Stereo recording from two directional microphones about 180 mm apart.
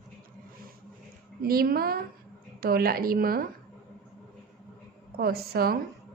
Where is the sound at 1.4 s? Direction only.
55° right (ahead or behind).